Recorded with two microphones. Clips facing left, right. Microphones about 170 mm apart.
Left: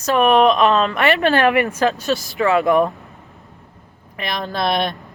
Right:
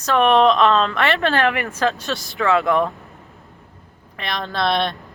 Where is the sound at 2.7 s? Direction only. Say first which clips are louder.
Left 3 dB; 20° left (ahead or behind).